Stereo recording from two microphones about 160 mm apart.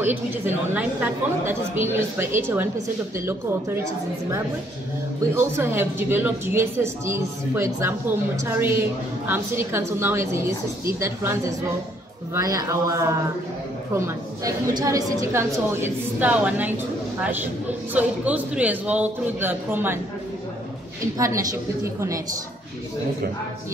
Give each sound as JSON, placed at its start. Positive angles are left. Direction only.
{"t": 0.0, "sound": "a woman's voice", "side_deg": -10}
{"t": 5.3, "sound": "a woman's voice", "side_deg": -15}
{"t": 21.2, "sound": "a woman's voice", "side_deg": -20}